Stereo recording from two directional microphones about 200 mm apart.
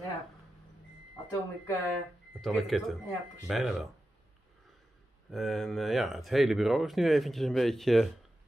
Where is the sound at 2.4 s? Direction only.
Centre (ahead or behind).